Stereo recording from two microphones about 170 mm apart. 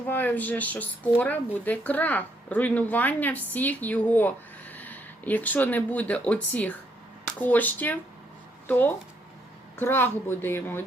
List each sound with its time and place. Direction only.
0.1 s speech: 10° left (ahead or behind)